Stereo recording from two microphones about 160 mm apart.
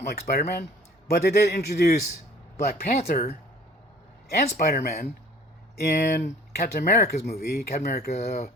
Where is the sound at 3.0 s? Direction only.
40° left (ahead or behind).